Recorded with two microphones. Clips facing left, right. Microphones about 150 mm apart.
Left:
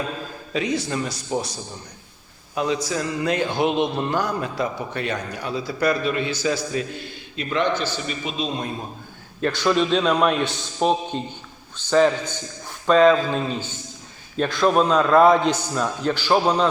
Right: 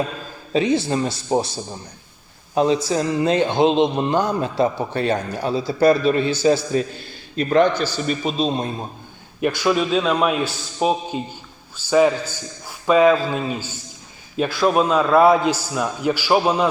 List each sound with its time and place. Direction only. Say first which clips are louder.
0.5 s a man's voice: right 6 dB; 30° right (ahead or behind)
2.6 s a man's voice: right 6 dB; 30° right (ahead or behind)
7.3 s a man's voice: right 6 dB; 40° right (ahead or behind)
9.4 s a man's voice: right 1 dB; 10° right (ahead or behind)